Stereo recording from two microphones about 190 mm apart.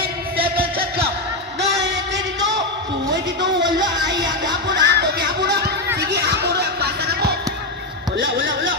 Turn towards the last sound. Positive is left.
turn(degrees=-60)  # may be behind; listen again after turning